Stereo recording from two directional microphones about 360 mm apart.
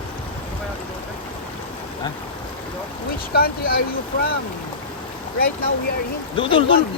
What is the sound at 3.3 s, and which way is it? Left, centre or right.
Speech, left.